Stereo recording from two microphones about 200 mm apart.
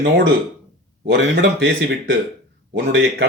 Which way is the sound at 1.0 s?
60° right (ahead or behind).